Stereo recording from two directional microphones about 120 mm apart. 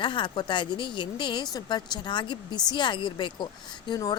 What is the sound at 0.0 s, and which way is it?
Speech, 40° left (ahead or behind).